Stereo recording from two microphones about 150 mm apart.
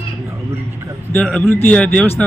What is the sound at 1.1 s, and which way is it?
Speech, 10° left (ahead or behind).